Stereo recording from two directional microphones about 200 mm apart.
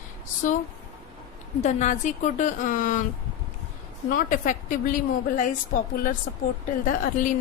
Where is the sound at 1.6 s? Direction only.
35° left (ahead or behind).